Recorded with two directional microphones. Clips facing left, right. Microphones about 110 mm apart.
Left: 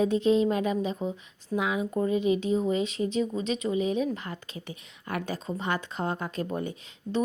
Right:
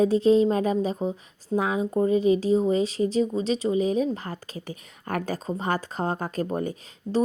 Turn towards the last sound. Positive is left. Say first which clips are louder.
# right 4 dB
turn(degrees=-40)  # may be behind; listen again after turning